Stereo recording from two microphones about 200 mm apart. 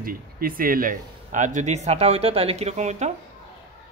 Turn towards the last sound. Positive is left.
turn(degrees=-35)  # may be behind; listen again after turning